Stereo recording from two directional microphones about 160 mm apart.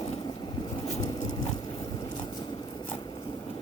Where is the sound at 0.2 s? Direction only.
25° left (ahead or behind).